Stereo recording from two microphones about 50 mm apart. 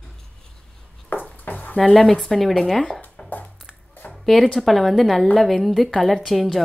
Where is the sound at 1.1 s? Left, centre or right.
Left.